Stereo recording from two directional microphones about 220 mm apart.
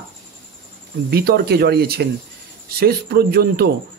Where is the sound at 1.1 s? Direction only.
45° right (ahead or behind).